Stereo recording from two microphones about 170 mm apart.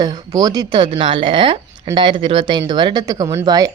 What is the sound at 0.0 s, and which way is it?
Speech, 20° right (ahead or behind).